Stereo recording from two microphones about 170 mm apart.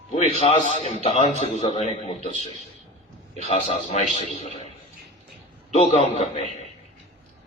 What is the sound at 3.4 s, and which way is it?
A man's voice, 40° left (ahead or behind).